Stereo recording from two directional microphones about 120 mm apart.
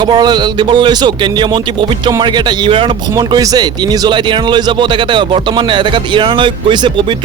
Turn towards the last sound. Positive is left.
turn(degrees=-45)  # may be behind; listen again after turning